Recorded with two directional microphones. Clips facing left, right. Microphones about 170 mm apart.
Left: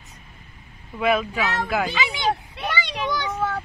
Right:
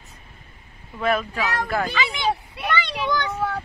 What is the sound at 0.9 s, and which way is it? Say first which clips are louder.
Speech: left 2 dB; 5° left (ahead or behind).